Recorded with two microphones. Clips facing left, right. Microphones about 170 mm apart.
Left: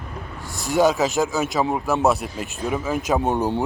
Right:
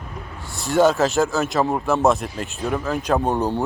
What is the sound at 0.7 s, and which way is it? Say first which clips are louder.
Speech: right 2 dB; 15° left (ahead or behind).